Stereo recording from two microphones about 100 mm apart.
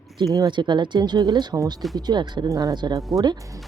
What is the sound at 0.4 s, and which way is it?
Speech, 50° right (ahead or behind).